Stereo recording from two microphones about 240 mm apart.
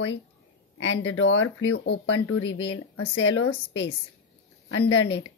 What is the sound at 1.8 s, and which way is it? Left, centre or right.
A woman's voice, left.